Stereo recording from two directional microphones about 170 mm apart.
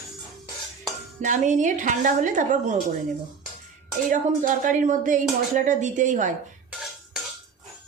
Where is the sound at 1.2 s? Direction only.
45° right (ahead or behind).